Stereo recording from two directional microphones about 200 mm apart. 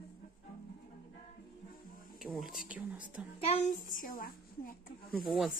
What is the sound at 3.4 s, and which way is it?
A child's voice, 40° left (ahead or behind).